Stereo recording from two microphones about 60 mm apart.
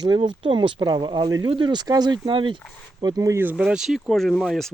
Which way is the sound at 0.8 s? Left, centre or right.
Right.